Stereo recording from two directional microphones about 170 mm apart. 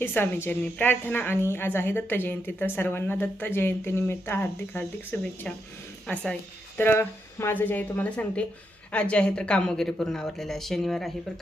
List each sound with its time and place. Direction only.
0.0 s a woman's voice: 15° left (ahead or behind)